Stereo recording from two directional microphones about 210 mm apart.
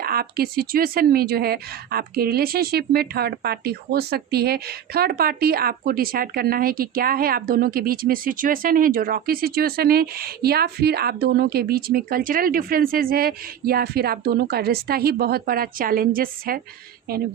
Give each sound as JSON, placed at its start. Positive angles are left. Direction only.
{"t": 0.0, "sound": "speech", "side_deg": -45}